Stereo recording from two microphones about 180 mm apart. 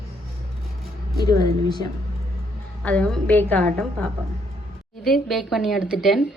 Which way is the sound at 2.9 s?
5° left (ahead or behind).